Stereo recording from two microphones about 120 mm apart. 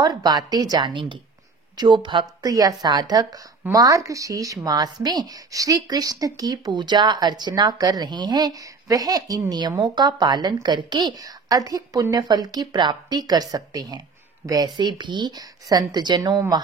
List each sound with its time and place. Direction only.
0.0 s a woman's voice: 35° right (ahead or behind)